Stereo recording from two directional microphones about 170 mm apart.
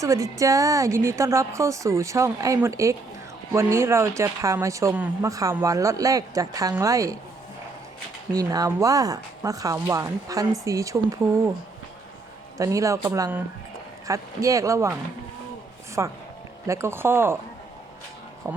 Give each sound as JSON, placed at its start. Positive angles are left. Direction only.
{"t": 0.0, "sound": "speech", "side_deg": -20}
{"t": 8.3, "sound": "speech", "side_deg": -20}
{"t": 12.5, "sound": "speech", "side_deg": -20}
{"t": 16.0, "sound": "speech", "side_deg": -20}
{"t": 18.5, "sound": "speech", "side_deg": -15}